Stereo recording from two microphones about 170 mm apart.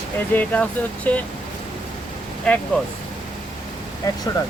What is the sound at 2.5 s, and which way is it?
Speech, 5° left (ahead or behind).